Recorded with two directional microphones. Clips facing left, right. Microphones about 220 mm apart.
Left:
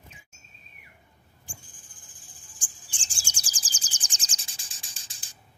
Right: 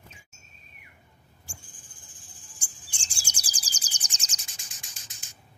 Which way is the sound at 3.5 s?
30° left (ahead or behind).